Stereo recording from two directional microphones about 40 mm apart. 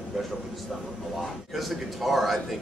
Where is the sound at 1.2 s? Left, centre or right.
Centre.